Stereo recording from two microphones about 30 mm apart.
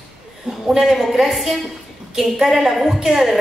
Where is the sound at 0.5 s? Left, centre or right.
Right.